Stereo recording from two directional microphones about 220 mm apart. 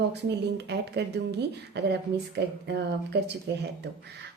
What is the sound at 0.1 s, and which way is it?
Speech, 50° right (ahead or behind).